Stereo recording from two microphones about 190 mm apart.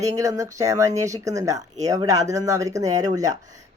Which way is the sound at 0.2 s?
15° right (ahead or behind).